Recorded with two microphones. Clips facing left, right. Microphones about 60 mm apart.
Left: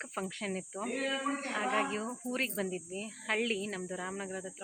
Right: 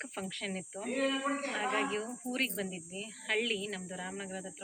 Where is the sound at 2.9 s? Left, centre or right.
Left.